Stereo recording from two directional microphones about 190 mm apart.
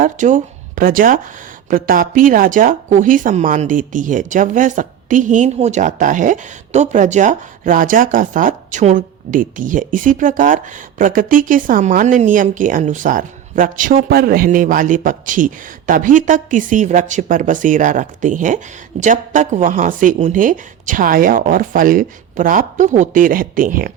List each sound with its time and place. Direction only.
0.0 s speech: 40° right (ahead or behind)